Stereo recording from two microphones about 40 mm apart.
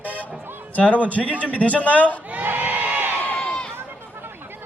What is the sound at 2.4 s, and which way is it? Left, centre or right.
Crowd, right.